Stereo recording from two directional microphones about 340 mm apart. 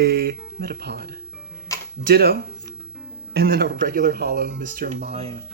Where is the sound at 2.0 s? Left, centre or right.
Right.